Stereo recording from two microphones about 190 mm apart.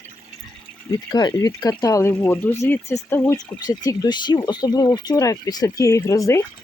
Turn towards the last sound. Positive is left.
turn(degrees=15)  # may be behind; listen again after turning